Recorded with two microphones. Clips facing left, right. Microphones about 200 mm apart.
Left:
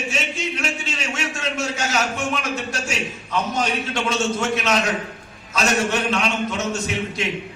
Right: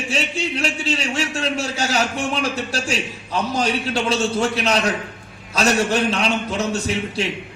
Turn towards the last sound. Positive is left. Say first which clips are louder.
# right 2 dB
turn(degrees=-35)  # may be behind; listen again after turning